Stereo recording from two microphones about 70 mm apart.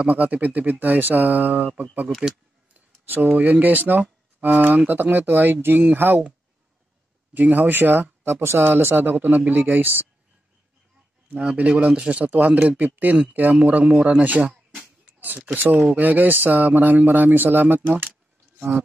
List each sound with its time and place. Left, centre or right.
0.0 s speech: right
2.0 s speech: centre
2.7 s a sound: right
3.3 s speech: right
7.3 s speech: right
11.2 s speech: centre
15.0 s a sound: right
15.5 s speech: right